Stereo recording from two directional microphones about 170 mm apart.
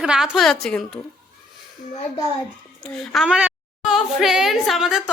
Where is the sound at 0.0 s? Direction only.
Centre (ahead or behind).